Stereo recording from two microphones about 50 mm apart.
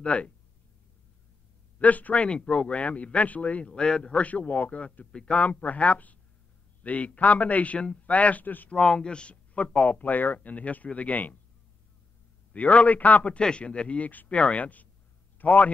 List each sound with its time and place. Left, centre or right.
0.0 s speech: left
1.8 s speech: left
2.2 s speech: left
3.7 s speech: centre
5.5 s speech: left
8.6 s speech: centre
12.5 s a man's voice: left